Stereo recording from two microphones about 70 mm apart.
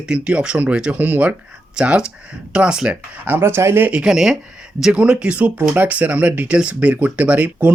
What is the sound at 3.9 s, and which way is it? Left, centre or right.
Speech, centre.